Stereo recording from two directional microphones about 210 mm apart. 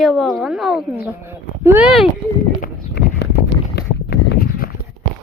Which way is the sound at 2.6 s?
50° left (ahead or behind).